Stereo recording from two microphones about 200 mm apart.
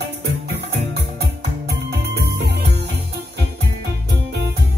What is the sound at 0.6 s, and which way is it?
Music, 55° right (ahead or behind).